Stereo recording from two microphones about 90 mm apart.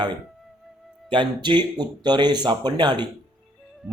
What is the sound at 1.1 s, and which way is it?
A man's voice, 60° right (ahead or behind).